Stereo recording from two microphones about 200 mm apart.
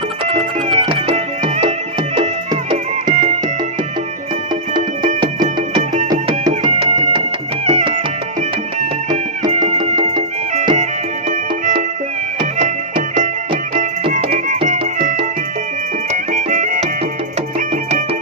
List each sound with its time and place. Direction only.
0.3 s music: 30° right (ahead or behind)
4.7 s music: 20° right (ahead or behind)
6.7 s music: 30° right (ahead or behind)
12.4 s music: 35° right (ahead or behind)
13.5 s music: 25° right (ahead or behind)
14.1 s music: 40° right (ahead or behind)
16.1 s music: 35° right (ahead or behind)